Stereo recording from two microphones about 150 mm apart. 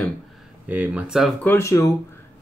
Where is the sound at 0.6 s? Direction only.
10° right (ahead or behind).